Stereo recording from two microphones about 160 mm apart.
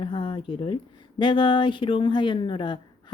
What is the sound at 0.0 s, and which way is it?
Speech, 30° left (ahead or behind).